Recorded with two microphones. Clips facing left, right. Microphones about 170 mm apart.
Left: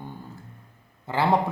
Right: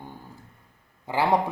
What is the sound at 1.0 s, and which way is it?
Speech, 10° right (ahead or behind).